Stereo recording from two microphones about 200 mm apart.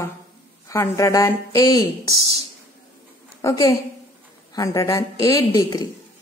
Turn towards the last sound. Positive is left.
turn(degrees=20)  # may be behind; listen again after turning